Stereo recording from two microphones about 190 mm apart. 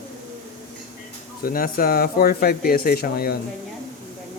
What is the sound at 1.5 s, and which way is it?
Speech, 50° left (ahead or behind).